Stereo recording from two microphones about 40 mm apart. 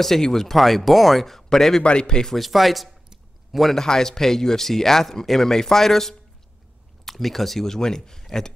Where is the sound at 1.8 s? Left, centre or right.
Left.